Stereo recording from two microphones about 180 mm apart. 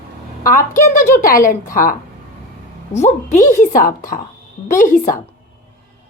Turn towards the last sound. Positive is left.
turn(degrees=50)  # may be behind; listen again after turning